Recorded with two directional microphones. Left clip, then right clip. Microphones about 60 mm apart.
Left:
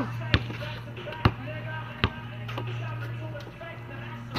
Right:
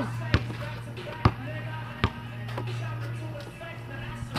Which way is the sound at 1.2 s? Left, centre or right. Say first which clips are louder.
Even; left.